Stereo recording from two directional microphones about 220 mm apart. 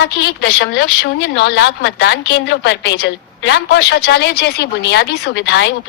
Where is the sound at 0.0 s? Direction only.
50° left (ahead or behind).